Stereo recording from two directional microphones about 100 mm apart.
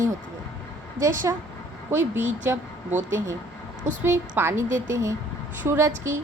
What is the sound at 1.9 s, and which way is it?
A woman's voice, 20° right (ahead or behind).